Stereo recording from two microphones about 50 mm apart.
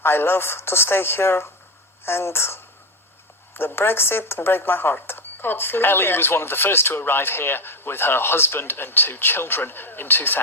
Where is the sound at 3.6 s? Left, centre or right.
Left.